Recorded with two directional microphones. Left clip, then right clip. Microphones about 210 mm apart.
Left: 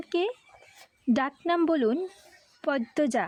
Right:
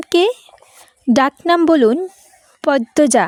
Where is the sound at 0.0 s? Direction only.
45° right (ahead or behind).